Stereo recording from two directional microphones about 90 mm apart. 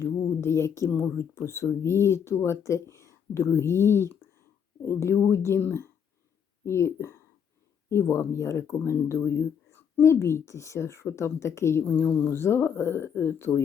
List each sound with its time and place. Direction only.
0.0 s speech: 30° left (ahead or behind)
11.9 s speech: 20° left (ahead or behind)